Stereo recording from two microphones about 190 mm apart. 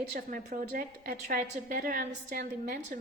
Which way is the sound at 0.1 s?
45° right (ahead or behind).